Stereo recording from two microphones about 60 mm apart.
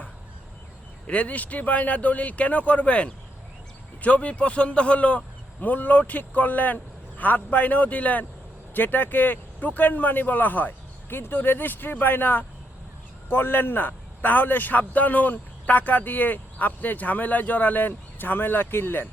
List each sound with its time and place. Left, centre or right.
1.0 s a man's voice: left